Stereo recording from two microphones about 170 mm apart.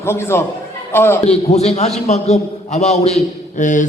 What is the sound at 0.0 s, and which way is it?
A man's voice, 15° left (ahead or behind).